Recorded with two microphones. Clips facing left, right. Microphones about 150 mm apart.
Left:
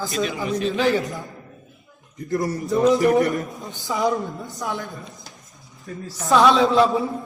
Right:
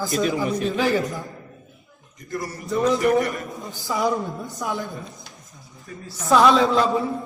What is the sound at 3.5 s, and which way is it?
A man's voice, centre (ahead or behind).